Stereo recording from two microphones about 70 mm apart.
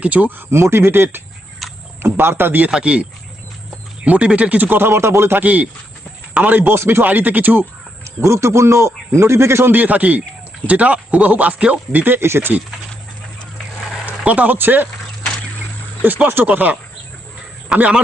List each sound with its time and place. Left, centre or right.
0.0 s a man's voice: right
1.6 s a sound: centre
2.0 s speech: right
2.6 s speech: centre; by 5.4 s right
5.4 s speech: right
8.0 s a man's voice: right
14.0 s speech: right
16.0 s speech: right
17.7 s speech: centre